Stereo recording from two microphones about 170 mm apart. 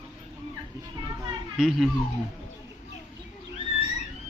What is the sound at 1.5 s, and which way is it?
Speech, centre (ahead or behind).